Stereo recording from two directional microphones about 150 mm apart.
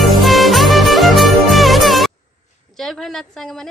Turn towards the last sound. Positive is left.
turn(degrees=5)  # may be behind; listen again after turning